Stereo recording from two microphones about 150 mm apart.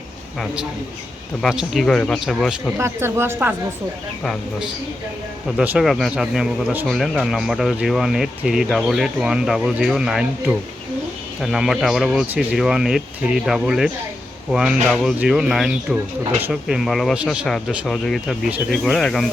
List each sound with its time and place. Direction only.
0.3 s speech: 5° right (ahead or behind)
2.7 s a woman's voice: 15° right (ahead or behind)
4.2 s speech: 5° left (ahead or behind)